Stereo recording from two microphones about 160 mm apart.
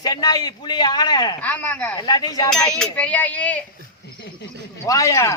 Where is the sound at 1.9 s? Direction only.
25° left (ahead or behind).